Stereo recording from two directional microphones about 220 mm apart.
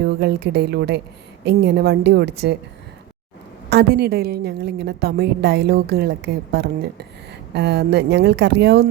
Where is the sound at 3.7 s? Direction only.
50° right (ahead or behind).